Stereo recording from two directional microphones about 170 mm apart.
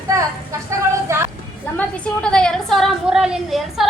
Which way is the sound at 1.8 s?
5° left (ahead or behind).